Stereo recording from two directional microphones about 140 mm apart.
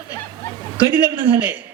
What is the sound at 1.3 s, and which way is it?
Speech, 15° right (ahead or behind).